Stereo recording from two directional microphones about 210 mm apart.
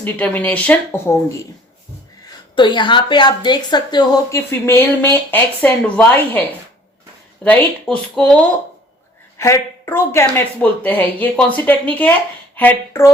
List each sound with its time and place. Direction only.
0.0 s speech: 5° left (ahead or behind)
2.6 s a woman's voice: 20° left (ahead or behind)
7.4 s speech: 5° left (ahead or behind)